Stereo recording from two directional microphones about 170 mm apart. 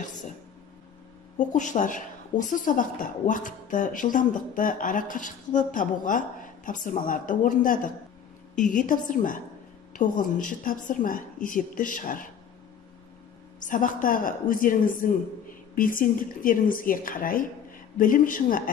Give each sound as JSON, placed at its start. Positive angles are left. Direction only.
{"t": 1.5, "sound": "speech", "side_deg": 45}
{"t": 13.6, "sound": "speech", "side_deg": 50}